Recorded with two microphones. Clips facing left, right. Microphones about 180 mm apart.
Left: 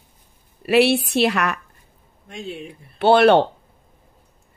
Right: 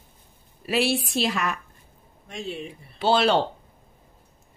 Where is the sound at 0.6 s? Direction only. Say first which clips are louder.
Left 8 dB; 65° left (ahead or behind).